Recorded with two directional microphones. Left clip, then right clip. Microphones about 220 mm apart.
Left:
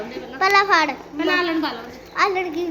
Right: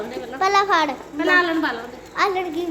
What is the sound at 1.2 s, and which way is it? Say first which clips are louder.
Speech: right 3 dB; 20° left (ahead or behind).